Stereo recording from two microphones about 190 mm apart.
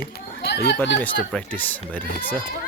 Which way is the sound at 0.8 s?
10° left (ahead or behind).